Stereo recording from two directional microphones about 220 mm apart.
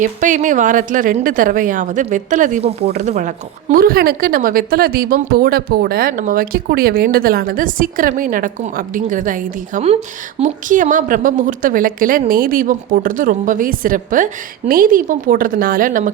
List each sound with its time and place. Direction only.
0.0 s a woman's voice: 35° right (ahead or behind)